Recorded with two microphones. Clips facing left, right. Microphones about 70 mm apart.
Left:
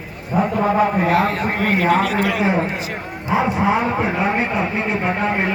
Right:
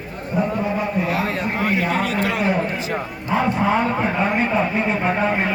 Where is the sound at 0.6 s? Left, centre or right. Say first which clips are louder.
Left 5 dB; left.